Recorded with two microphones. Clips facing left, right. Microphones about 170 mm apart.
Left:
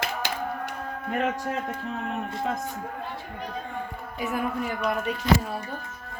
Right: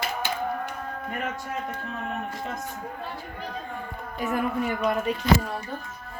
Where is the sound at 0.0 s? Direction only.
90° left.